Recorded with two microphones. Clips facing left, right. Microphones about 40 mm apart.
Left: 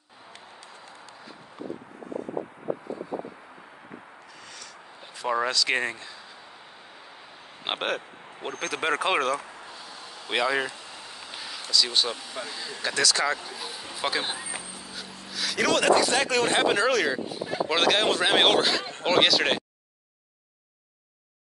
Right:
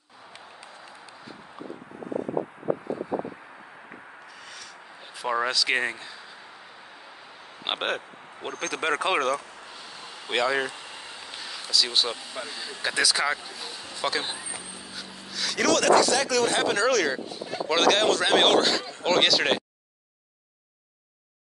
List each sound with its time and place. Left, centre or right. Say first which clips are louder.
5.2 s speech: even; centre
7.6 s speech: even; centre
13.9 s speech: even; centre
15.0 s a sound: even; centre
15.7 s speech: right 2 dB; centre
16.1 s speech: even; left; by 19.6 s centre